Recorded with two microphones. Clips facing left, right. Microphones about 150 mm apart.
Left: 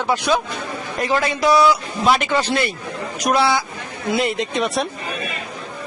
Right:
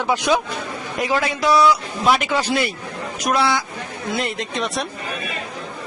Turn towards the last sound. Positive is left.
turn(degrees=0)  # may be behind; listen again after turning